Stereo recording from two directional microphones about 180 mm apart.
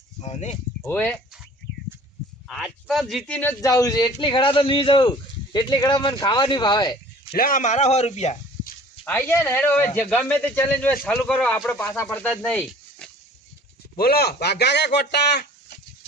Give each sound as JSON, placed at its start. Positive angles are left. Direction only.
{"t": 0.2, "sound": "a man's voice", "side_deg": 40}
{"t": 0.8, "sound": "speech", "side_deg": 10}
{"t": 2.5, "sound": "speech", "side_deg": 0}
{"t": 3.6, "sound": "a man's voice", "side_deg": 20}
{"t": 7.3, "sound": "a man's voice", "side_deg": 50}
{"t": 9.0, "sound": "speech", "side_deg": 15}
{"t": 13.9, "sound": "speech", "side_deg": 55}